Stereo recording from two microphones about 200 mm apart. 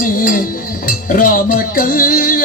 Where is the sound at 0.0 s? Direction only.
45° left (ahead or behind).